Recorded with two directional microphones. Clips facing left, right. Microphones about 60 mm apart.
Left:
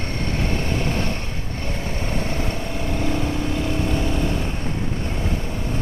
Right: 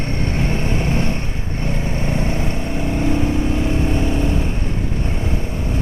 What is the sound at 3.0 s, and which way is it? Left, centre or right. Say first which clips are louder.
Vehicle: right 5 dB; right.